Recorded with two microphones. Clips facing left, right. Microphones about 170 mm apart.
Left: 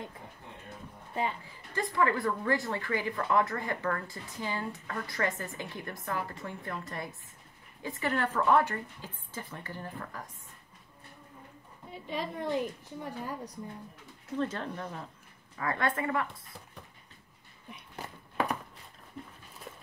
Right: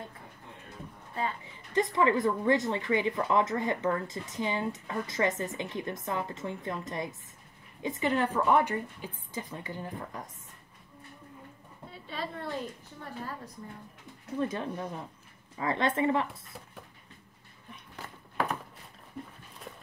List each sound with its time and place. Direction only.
1.4 s a woman's voice: 20° right (ahead or behind)
11.9 s a woman's voice: 15° left (ahead or behind)
14.3 s a woman's voice: 15° right (ahead or behind)